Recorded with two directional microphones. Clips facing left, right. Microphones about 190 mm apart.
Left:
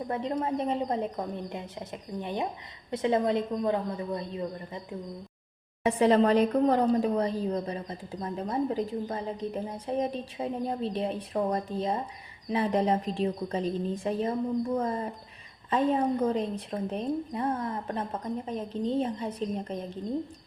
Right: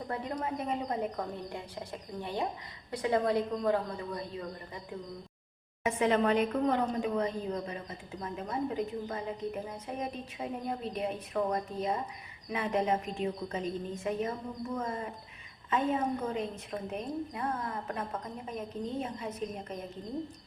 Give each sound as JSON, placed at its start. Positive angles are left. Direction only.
{"t": 0.1, "sound": "a woman's voice", "side_deg": 25}
{"t": 5.8, "sound": "a woman's voice", "side_deg": 35}